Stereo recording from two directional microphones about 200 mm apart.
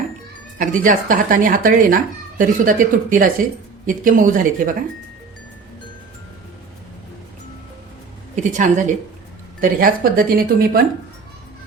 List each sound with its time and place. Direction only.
0.6 s speech: 40° right (ahead or behind)
8.4 s speech: 40° right (ahead or behind)